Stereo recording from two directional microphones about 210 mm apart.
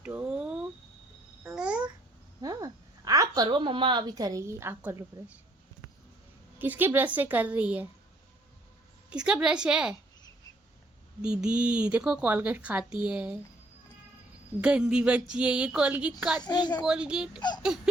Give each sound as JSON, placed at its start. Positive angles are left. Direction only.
{"t": 0.0, "sound": "a sound", "side_deg": -5}
{"t": 1.5, "sound": "babbling", "side_deg": -5}
{"t": 2.4, "sound": "a woman's voice", "side_deg": -15}
{"t": 6.6, "sound": "a woman's voice", "side_deg": -10}
{"t": 9.0, "sound": "speech", "side_deg": -5}
{"t": 11.2, "sound": "speech", "side_deg": -5}
{"t": 14.6, "sound": "speech", "side_deg": -5}
{"t": 16.4, "sound": "a woman's voice", "side_deg": 20}
{"t": 16.8, "sound": "speech", "side_deg": -5}